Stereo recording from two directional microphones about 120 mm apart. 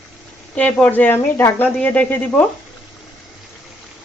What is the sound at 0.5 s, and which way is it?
Speech, 10° left (ahead or behind).